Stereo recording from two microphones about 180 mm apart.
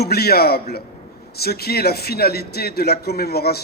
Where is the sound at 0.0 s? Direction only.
60° left (ahead or behind).